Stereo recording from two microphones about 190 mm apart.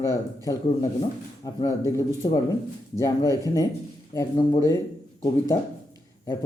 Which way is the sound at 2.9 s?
15° left (ahead or behind).